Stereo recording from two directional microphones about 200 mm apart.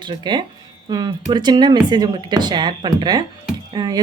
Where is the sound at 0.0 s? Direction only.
20° right (ahead or behind).